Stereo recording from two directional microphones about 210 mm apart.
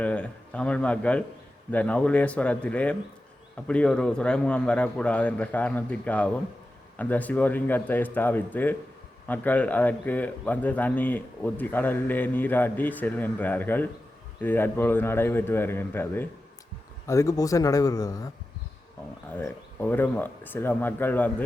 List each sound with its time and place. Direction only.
0.0 s a man's voice: 5° left (ahead or behind)
19.3 s a man's voice: 10° left (ahead or behind)